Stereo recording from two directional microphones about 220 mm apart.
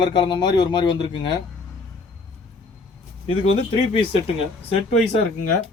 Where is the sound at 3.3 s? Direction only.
75° left (ahead or behind).